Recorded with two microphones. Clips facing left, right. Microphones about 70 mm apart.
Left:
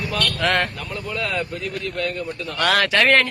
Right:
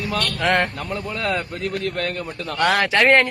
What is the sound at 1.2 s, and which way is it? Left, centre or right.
A man's voice, right.